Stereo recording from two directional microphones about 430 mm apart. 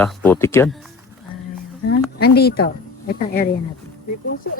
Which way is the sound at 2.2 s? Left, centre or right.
Left.